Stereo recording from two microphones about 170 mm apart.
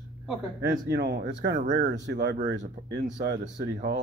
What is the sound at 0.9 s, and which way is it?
Speech, 90° right.